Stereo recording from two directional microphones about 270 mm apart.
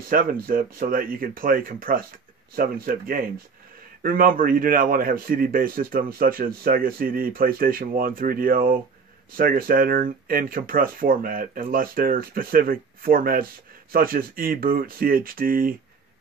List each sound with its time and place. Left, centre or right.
0.0 s a man's voice: right